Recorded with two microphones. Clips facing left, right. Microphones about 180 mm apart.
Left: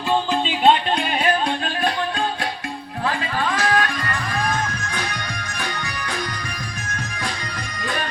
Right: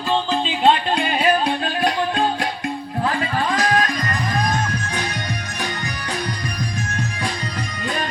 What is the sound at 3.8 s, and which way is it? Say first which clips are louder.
Music: right 2 dB; 40° right (ahead or behind).